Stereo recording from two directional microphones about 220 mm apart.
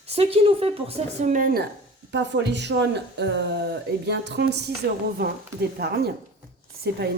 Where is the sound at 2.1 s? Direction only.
55° right (ahead or behind).